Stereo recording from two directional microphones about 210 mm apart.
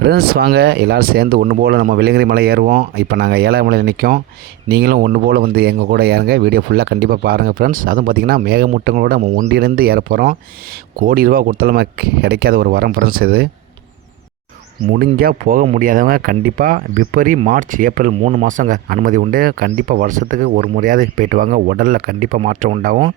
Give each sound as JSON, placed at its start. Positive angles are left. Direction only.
{"t": 0.0, "sound": "speech", "side_deg": -50}
{"t": 9.5, "sound": "speech", "side_deg": -50}
{"t": 14.9, "sound": "speech", "side_deg": -45}